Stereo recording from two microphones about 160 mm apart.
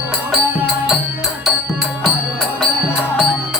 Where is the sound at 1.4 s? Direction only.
Centre (ahead or behind).